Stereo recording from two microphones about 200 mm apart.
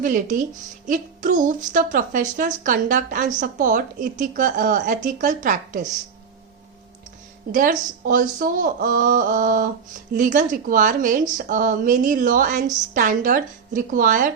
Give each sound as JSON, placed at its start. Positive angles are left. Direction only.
{"t": 0.0, "sound": "a woman's voice", "side_deg": -40}
{"t": 7.5, "sound": "a woman's voice", "side_deg": -45}